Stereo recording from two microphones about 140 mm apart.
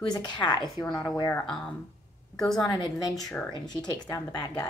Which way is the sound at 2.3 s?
5° left (ahead or behind).